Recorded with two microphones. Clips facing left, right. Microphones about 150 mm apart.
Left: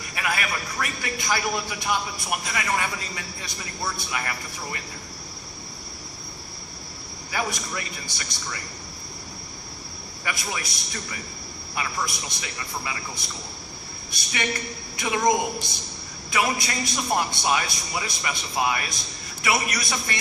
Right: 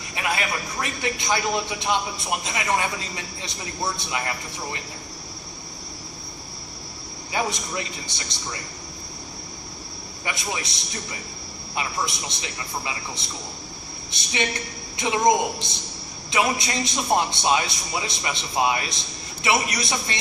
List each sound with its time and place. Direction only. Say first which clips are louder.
0.2 s a man's voice: right 2 dB; 25° right (ahead or behind)
7.3 s a man's voice: right 2 dB; 25° right (ahead or behind)
10.2 s a man's voice: right 1 dB; 25° right (ahead or behind)